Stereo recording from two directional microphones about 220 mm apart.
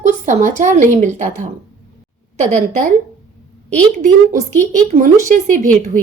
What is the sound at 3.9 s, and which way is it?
A woman's voice, 35° right (ahead or behind).